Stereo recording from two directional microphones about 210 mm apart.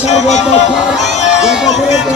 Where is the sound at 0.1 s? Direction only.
35° left (ahead or behind).